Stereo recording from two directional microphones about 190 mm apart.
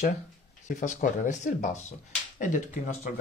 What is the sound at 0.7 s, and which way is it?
Speech, 40° left (ahead or behind).